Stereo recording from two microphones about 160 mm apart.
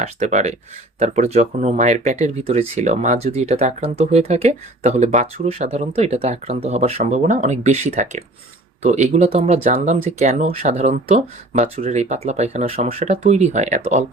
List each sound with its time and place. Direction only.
0.0 s speech: 45° right (ahead or behind)